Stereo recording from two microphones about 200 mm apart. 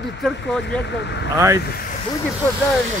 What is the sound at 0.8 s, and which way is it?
Speech, 60° left (ahead or behind).